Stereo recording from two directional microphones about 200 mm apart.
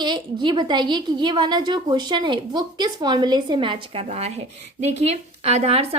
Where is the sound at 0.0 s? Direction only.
25° right (ahead or behind).